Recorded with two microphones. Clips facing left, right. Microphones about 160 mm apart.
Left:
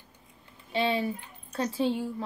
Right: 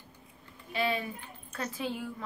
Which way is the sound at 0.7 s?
30° left (ahead or behind).